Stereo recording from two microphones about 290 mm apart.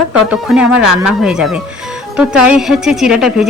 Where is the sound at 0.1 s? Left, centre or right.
Centre.